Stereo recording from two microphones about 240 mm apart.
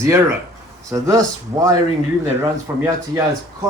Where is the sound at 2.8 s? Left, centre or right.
Centre.